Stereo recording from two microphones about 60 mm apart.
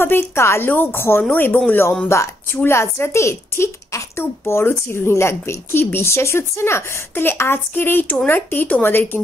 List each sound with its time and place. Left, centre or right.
0.0 s a woman's voice: left
1.3 s a woman's voice: left